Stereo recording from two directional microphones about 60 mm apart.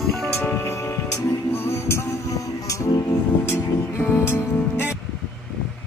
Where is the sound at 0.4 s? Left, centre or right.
Left.